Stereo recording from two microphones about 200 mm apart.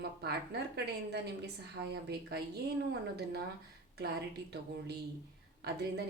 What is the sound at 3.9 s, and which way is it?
A woman's voice, 55° right (ahead or behind).